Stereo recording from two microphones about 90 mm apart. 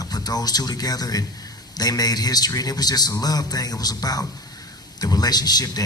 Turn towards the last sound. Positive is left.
turn(degrees=50)  # may be behind; listen again after turning